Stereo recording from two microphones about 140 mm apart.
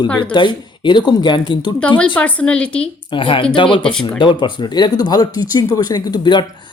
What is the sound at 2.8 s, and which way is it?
Speech, 35° left (ahead or behind).